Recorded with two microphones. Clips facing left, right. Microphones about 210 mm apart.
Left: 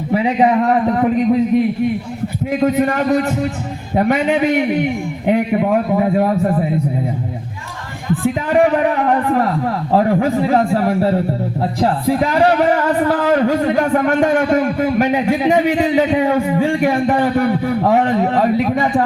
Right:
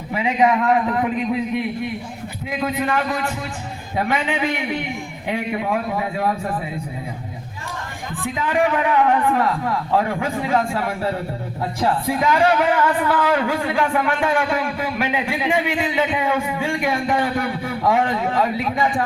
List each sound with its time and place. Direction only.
0.1 s a man's voice: 35° left (ahead or behind)
8.1 s speech: 40° left (ahead or behind)